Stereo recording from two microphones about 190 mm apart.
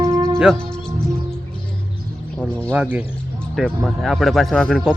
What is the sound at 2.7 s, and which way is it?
Speech, 10° right (ahead or behind).